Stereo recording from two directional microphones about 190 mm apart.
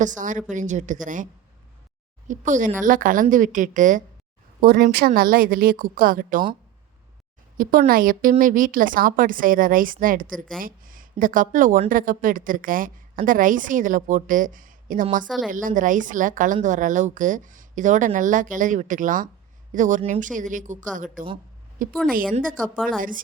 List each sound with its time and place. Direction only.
0.2 s a woman's voice: 40° right (ahead or behind)
7.6 s speech: 50° right (ahead or behind)
15.3 s speech: centre (ahead or behind)
15.5 s speech: 45° right (ahead or behind)
23.0 s speech: 45° right (ahead or behind)